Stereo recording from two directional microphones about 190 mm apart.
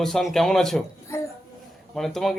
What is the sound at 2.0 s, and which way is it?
Speech, centre (ahead or behind).